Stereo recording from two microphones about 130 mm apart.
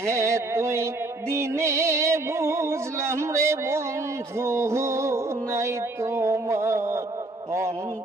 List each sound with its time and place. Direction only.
0.0 s music: 20° right (ahead or behind)